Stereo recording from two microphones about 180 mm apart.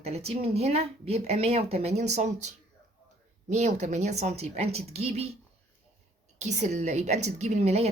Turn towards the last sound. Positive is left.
turn(degrees=-35)  # may be behind; listen again after turning